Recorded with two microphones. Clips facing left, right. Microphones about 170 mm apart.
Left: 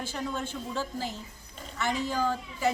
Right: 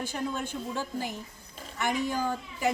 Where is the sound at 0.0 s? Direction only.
15° right (ahead or behind).